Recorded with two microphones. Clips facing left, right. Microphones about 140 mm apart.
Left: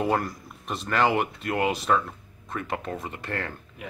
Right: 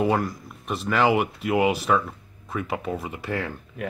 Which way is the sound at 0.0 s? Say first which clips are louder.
Right 3 dB; centre (ahead or behind).